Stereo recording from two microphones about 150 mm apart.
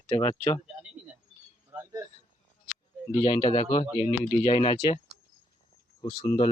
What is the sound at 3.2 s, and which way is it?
Speech, 25° left (ahead or behind).